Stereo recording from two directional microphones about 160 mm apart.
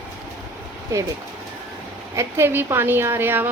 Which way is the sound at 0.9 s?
20° right (ahead or behind).